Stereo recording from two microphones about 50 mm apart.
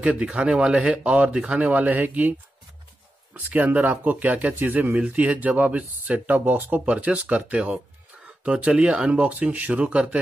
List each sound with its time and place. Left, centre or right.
0.0 s speech: right
1.6 s speech: right
3.3 s speech: right
6.9 s speech: right